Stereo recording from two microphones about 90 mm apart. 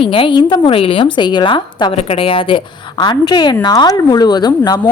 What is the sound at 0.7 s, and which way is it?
A woman's voice, 85° left.